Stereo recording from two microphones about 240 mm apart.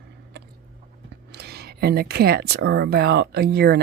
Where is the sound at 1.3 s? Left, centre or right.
Right.